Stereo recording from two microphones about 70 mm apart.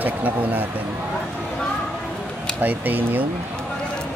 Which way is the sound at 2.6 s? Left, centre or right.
Right.